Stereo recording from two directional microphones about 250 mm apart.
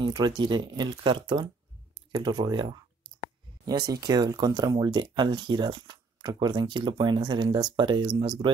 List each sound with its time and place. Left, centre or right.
0.0 s speech: centre